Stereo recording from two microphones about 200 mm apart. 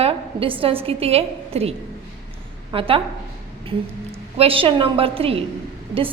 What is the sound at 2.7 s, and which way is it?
Speech, 25° right (ahead or behind).